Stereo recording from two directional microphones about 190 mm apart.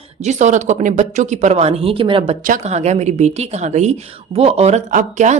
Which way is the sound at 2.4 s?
40° right (ahead or behind).